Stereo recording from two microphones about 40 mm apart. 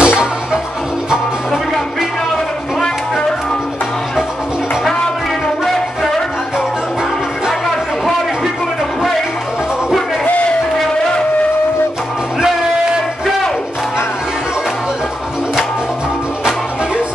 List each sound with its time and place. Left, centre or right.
0.0 s music: right